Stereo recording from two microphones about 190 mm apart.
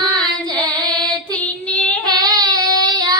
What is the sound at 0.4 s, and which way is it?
Singing, 20° right (ahead or behind).